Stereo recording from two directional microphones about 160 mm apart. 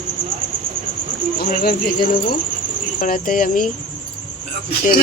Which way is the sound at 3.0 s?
60° left (ahead or behind).